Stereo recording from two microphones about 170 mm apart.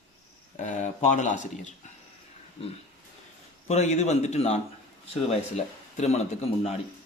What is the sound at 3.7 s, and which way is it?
Speech, 40° left (ahead or behind).